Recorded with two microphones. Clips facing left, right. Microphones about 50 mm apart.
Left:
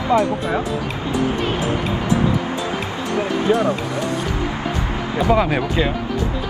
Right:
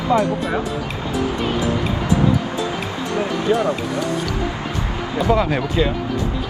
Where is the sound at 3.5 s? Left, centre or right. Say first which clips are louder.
Left 1 dB; centre.